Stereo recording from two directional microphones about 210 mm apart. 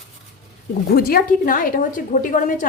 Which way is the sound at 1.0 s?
45° left (ahead or behind).